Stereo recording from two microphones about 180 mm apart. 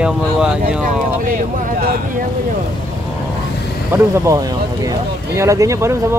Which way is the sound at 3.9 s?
15° right (ahead or behind).